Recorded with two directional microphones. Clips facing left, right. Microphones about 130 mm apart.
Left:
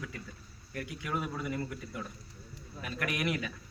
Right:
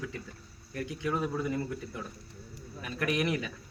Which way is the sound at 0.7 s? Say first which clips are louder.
Right 4 dB; 25° right (ahead or behind).